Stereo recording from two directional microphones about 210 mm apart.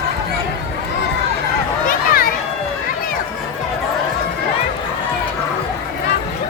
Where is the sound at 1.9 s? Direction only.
45° left (ahead or behind).